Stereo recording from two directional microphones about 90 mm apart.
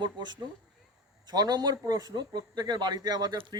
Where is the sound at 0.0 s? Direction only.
55° right (ahead or behind).